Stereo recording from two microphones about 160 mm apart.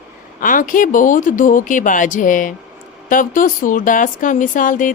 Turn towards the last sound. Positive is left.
turn(degrees=55)  # may be behind; listen again after turning